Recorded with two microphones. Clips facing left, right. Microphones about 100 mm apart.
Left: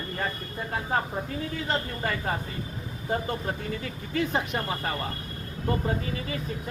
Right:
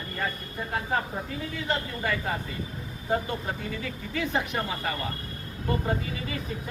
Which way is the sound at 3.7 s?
35° left (ahead or behind).